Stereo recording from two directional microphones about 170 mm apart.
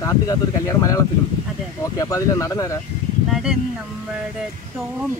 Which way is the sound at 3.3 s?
5° right (ahead or behind).